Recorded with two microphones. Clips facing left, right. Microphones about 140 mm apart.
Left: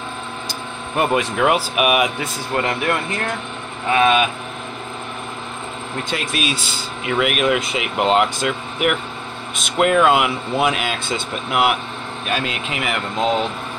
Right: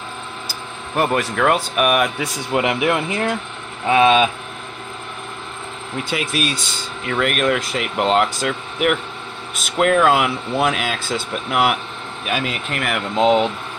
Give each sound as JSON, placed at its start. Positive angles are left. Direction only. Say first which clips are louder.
{"t": 0.5, "sound": "speech", "louder": "left 2 dB", "side_deg": 0}
{"t": 2.5, "sound": "speech", "louder": "right 3 dB", "side_deg": -15}
{"t": 5.9, "sound": "speech", "louder": "right 2 dB", "side_deg": -5}
{"t": 13.1, "sound": "speech", "louder": "right 5 dB", "side_deg": -20}